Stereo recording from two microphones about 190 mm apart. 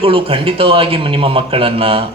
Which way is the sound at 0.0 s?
30° right (ahead or behind).